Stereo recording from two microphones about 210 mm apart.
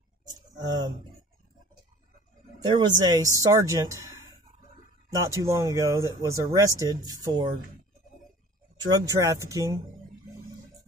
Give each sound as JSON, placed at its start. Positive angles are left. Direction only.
{"t": 0.3, "sound": "speech", "side_deg": -20}
{"t": 2.6, "sound": "speech", "side_deg": -20}
{"t": 5.2, "sound": "speech", "side_deg": -15}
{"t": 8.8, "sound": "speech", "side_deg": -15}